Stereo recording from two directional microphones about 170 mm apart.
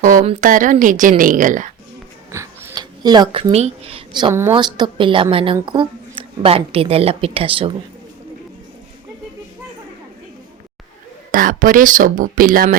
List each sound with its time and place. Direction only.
0.0 s speech: 50° right (ahead or behind)
2.3 s a sound: 15° right (ahead or behind)
3.5 s a woman's voice: 35° right (ahead or behind)
11.3 s speech: 55° right (ahead or behind)